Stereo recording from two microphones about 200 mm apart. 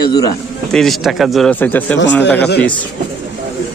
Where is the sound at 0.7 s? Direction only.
Centre (ahead or behind).